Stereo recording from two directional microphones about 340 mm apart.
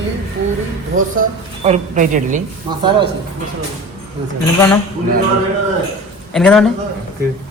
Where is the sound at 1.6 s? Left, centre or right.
Right.